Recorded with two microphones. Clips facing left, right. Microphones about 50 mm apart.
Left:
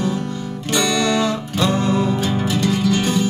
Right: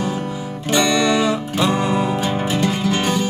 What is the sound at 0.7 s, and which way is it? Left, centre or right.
Music, right.